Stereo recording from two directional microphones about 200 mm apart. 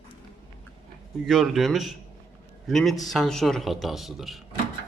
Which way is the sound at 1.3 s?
Centre (ahead or behind).